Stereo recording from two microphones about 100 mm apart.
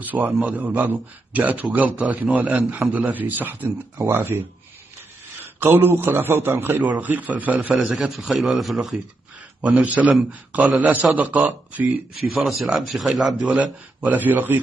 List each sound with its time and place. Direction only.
0.0 s a man's voice: 15° right (ahead or behind)
5.4 s a man's voice: 20° right (ahead or behind)
7.9 s a man's voice: centre (ahead or behind)
12.2 s a man's voice: centre (ahead or behind)
13.6 s a man's voice: 15° right (ahead or behind)